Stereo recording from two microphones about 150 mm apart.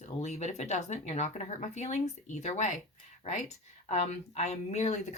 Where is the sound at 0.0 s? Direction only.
50° left (ahead or behind).